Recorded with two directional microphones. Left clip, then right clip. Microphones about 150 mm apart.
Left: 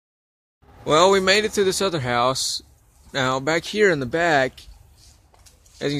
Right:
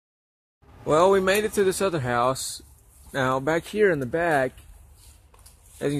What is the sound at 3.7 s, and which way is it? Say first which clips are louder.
Speech: left 3 dB; 20° left (ahead or behind).